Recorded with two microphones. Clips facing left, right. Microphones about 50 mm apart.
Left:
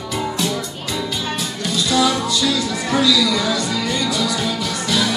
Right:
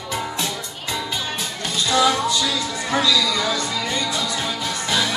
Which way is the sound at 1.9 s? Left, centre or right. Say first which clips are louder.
Even; right.